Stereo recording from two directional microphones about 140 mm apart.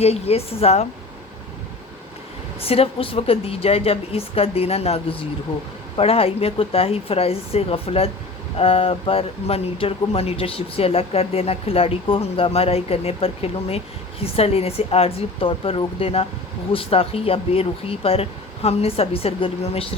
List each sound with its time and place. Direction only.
0.0 s speech: 45° left (ahead or behind)
2.6 s speech: 45° left (ahead or behind)